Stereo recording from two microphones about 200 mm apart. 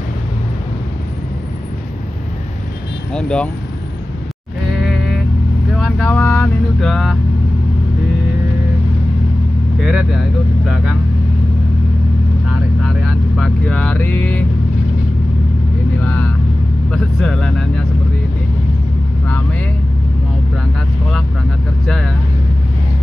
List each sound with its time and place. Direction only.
3.1 s speech: 5° left (ahead or behind)
4.8 s vehicle: centre (ahead or behind)
9.8 s vehicle: centre (ahead or behind)
12.8 s vehicle: centre (ahead or behind)
16.0 s vehicle: 10° left (ahead or behind)
16.9 s speech: centre (ahead or behind)
21.8 s speech: centre (ahead or behind)